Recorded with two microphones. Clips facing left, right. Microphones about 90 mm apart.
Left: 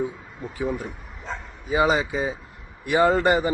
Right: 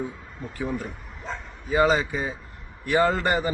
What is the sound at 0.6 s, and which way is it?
Speech, 5° left (ahead or behind).